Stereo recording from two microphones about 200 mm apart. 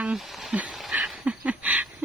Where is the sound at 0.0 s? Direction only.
Centre (ahead or behind).